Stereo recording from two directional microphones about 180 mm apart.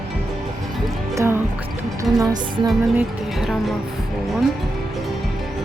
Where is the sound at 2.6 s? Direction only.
Centre (ahead or behind).